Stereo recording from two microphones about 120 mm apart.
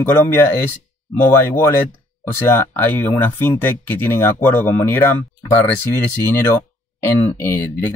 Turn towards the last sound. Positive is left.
turn(degrees=20)  # may be behind; listen again after turning